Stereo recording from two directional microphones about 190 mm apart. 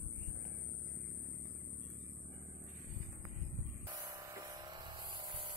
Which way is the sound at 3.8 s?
20° right (ahead or behind).